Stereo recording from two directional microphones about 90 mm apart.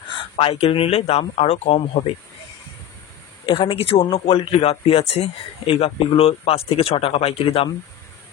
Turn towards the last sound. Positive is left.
turn(degrees=90)